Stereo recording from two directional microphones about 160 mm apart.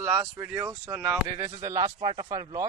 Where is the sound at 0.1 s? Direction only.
10° right (ahead or behind).